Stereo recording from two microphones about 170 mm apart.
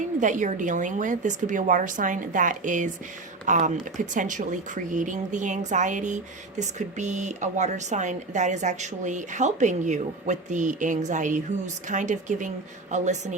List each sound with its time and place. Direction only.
0.0 s speech: 50° right (ahead or behind)